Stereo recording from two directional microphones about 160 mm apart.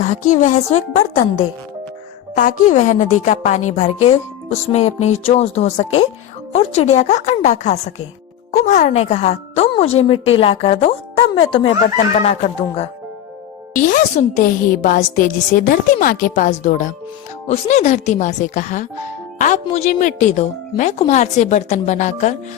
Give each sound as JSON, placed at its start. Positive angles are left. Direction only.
{"t": 0.0, "sound": "a woman's voice", "side_deg": 50}
{"t": 13.7, "sound": "a woman's voice", "side_deg": 55}